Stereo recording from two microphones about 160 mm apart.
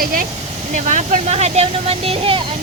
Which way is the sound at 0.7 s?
50° right (ahead or behind).